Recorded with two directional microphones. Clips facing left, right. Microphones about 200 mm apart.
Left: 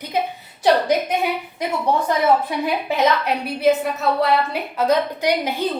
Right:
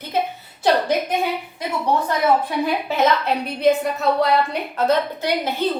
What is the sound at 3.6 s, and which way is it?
A woman's voice, 5° left (ahead or behind).